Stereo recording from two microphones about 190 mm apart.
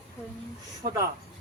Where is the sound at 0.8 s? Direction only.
40° right (ahead or behind).